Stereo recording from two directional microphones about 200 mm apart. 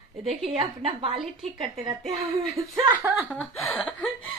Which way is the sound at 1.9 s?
15° right (ahead or behind).